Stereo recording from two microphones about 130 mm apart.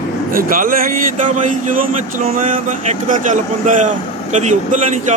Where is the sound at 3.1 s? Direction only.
80° right.